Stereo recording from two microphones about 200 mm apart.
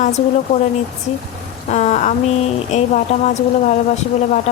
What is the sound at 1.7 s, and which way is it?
Speech, 35° left (ahead or behind).